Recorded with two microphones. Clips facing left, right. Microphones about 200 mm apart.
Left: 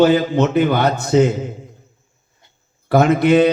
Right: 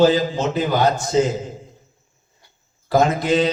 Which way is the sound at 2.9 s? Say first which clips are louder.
Left 4 dB; 60° left (ahead or behind).